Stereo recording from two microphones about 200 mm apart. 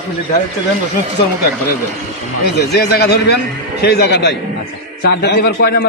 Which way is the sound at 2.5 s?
55° left (ahead or behind).